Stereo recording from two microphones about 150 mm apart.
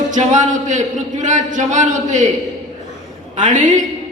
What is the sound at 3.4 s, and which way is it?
Speech, 55° right (ahead or behind).